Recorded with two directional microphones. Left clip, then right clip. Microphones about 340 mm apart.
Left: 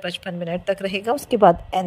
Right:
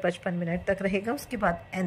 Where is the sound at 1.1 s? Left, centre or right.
Left.